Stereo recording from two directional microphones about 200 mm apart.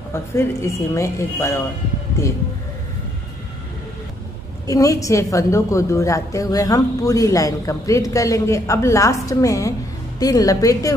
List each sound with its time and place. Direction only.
0.1 s a woman's voice: 15° left (ahead or behind)
4.6 s a woman's voice: 15° left (ahead or behind)